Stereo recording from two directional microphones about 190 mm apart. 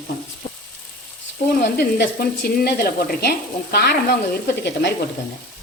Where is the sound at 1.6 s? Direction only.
55° left (ahead or behind).